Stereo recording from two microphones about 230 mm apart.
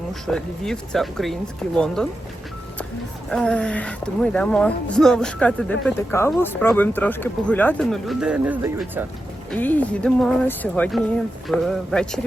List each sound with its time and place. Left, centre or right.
0.1 s speech: centre
3.2 s speech: centre
9.5 s speech: centre